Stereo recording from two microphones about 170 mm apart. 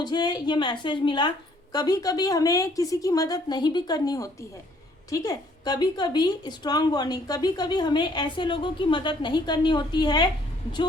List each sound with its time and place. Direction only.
0.0 s a woman's voice: 25° left (ahead or behind)